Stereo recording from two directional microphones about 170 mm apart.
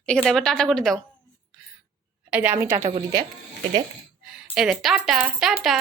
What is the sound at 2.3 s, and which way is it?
Speech, 10° right (ahead or behind).